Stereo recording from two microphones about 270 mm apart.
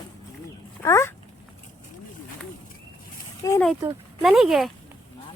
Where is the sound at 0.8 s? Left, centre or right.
Centre.